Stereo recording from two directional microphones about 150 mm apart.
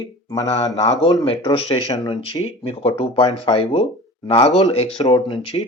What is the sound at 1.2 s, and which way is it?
Speech, 40° left (ahead or behind).